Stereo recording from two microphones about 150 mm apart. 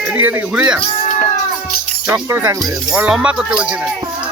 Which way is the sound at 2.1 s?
15° right (ahead or behind).